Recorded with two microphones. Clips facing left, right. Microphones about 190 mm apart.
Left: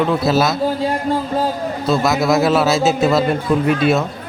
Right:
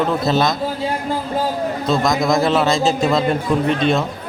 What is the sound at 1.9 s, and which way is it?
A man's voice, 5° left (ahead or behind).